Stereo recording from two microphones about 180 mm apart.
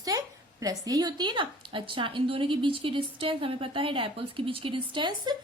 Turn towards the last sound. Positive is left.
turn(degrees=-25)  # may be behind; listen again after turning